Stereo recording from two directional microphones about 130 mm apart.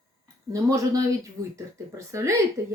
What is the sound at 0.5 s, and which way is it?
Speech, 25° right (ahead or behind).